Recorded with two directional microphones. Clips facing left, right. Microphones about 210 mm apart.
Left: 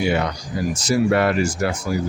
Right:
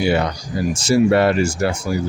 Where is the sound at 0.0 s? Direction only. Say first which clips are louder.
Right 2 dB; 35° right (ahead or behind).